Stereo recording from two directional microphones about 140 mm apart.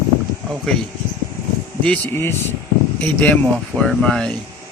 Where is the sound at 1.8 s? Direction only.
15° left (ahead or behind).